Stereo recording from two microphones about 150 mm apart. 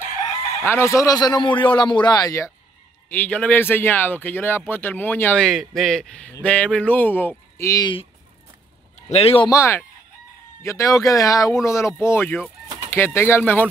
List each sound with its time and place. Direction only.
0.7 s speech: 15° left (ahead or behind)
3.1 s a man's voice: 10° left (ahead or behind)
8.9 s speech: 40° left (ahead or behind)
9.5 s speech: 15° left (ahead or behind)